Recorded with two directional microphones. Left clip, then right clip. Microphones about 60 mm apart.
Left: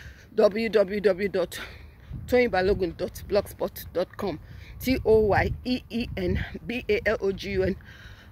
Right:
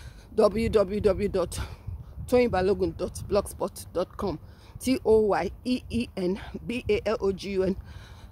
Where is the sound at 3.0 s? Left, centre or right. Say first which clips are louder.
Left 3 dB; right.